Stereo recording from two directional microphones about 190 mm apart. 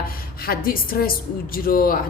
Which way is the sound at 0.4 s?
50° left (ahead or behind).